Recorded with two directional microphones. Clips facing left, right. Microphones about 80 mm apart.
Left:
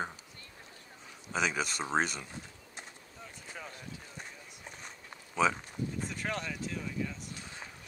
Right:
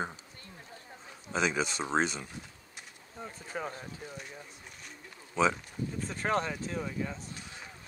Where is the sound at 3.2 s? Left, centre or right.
Right.